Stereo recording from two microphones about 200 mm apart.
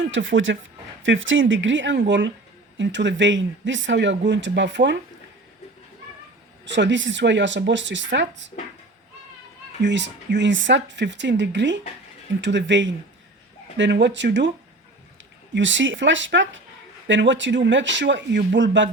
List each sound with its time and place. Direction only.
0.0 s speech: 70° right (ahead or behind)
6.7 s speech: 65° right (ahead or behind)
9.8 s speech: 60° right (ahead or behind)
15.5 s speech: 65° right (ahead or behind)